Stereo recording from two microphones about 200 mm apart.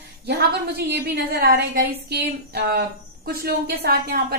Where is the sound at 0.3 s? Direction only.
55° right (ahead or behind).